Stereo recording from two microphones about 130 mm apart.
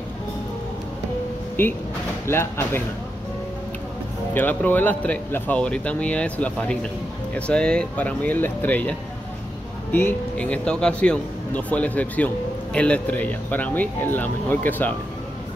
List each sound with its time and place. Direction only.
1.6 s speech: 15° left (ahead or behind)
4.3 s speech: 15° left (ahead or behind)
9.9 s speech: 10° left (ahead or behind)